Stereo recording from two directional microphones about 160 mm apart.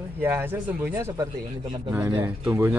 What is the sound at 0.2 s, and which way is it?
Speech, 15° right (ahead or behind).